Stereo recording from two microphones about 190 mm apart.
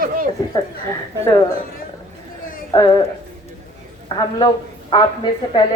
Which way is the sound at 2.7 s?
20° left (ahead or behind).